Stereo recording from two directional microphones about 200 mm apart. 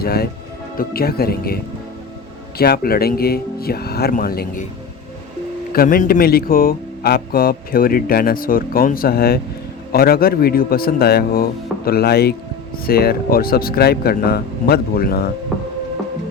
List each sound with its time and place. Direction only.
0.0 s speech: 50° left (ahead or behind)
2.6 s speech: 50° left (ahead or behind)
5.7 s speech: 45° left (ahead or behind)